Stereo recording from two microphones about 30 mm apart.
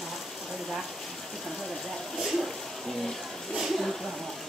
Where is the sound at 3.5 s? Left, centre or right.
Centre.